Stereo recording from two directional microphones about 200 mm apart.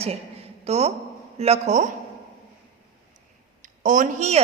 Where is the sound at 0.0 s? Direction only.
30° right (ahead or behind).